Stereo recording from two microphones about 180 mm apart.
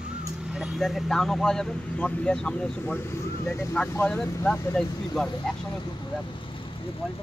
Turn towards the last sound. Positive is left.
turn(degrees=5)  # may be behind; listen again after turning